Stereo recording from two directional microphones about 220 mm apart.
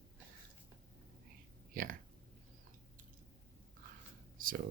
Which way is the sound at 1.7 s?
40° right (ahead or behind).